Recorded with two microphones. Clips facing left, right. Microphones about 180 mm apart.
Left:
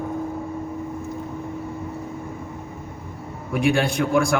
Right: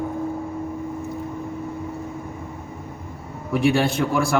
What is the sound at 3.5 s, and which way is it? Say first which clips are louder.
Speech: right 1 dB; centre (ahead or behind).